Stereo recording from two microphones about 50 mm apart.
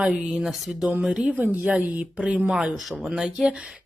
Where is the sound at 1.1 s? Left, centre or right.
Right.